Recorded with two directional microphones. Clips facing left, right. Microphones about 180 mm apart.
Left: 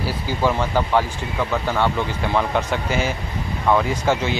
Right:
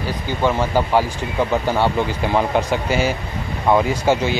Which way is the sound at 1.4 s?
25° right (ahead or behind).